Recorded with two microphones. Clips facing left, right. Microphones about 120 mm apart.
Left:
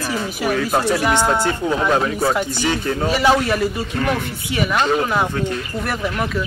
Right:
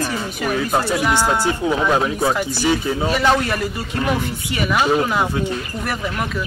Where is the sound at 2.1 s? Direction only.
5° left (ahead or behind).